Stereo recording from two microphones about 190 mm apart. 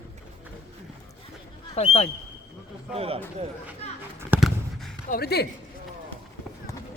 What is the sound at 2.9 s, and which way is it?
Speech, 30° right (ahead or behind).